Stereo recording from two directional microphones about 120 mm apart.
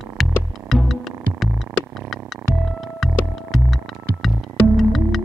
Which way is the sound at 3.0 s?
Centre (ahead or behind).